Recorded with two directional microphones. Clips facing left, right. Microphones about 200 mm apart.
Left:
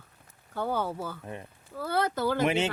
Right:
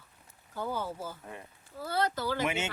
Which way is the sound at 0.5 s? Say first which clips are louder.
Left 5 dB; 60° left (ahead or behind).